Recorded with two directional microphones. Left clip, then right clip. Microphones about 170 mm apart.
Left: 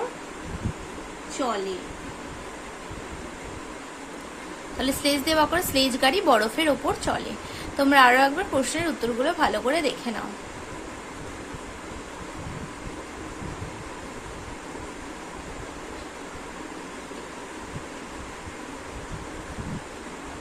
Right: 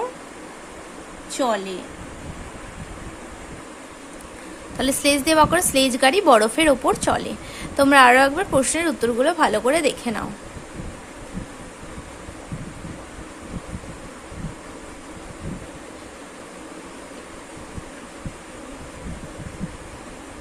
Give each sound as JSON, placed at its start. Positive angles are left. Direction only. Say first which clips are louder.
{"t": 4.8, "sound": "a woman's voice", "louder": "right 5 dB", "side_deg": -30}